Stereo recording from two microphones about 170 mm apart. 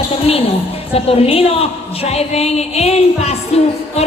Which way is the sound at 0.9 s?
35° left (ahead or behind).